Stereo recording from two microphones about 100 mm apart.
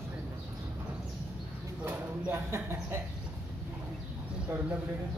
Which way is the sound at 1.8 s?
20° right (ahead or behind).